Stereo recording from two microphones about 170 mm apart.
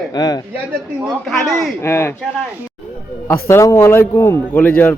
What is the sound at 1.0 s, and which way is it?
Speech, centre (ahead or behind).